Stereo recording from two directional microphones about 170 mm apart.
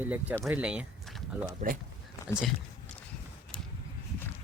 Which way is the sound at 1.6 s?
50° right (ahead or behind).